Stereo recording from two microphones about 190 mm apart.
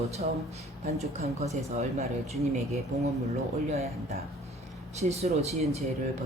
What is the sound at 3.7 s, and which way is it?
A man's voice, 35° right (ahead or behind).